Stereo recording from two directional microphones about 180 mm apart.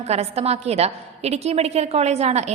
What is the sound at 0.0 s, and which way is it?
A woman's voice, 35° right (ahead or behind).